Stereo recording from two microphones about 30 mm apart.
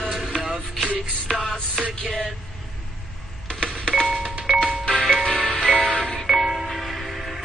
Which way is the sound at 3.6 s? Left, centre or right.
Left.